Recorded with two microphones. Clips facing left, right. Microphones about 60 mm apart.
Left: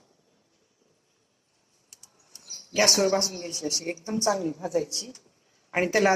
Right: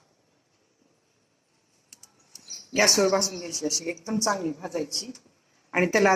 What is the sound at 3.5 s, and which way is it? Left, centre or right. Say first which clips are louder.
Speech: right 3 dB; right.